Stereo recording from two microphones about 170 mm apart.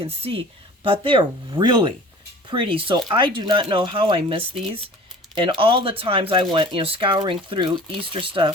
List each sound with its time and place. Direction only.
0.0 s speech: 35° right (ahead or behind)